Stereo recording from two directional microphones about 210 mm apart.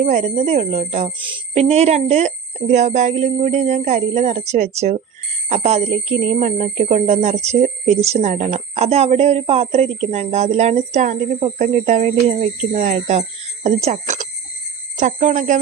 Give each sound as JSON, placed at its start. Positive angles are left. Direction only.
{"t": 0.0, "sound": "speech", "side_deg": -35}